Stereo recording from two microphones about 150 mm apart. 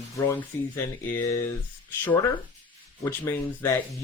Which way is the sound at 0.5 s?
15° left (ahead or behind).